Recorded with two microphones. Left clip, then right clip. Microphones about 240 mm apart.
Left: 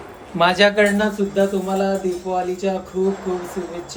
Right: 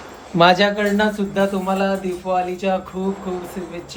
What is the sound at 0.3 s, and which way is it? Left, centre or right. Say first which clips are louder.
Speech: right 4 dB; right.